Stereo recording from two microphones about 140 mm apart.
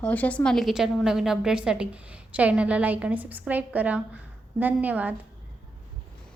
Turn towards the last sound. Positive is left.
turn(degrees=-10)  # may be behind; listen again after turning